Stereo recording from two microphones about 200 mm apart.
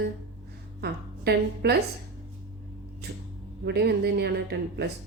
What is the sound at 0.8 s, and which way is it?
Speech, 55° right (ahead or behind).